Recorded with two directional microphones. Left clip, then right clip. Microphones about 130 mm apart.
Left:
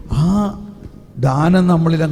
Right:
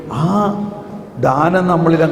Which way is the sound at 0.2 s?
35° left (ahead or behind).